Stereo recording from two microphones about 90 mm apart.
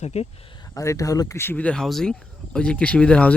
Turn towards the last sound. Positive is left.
turn(degrees=15)  # may be behind; listen again after turning